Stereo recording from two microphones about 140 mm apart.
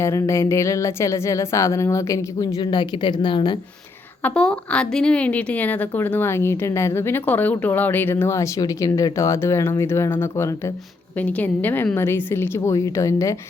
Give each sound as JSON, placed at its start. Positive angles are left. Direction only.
{"t": 0.0, "sound": "speech", "side_deg": 20}
{"t": 4.2, "sound": "speech", "side_deg": 5}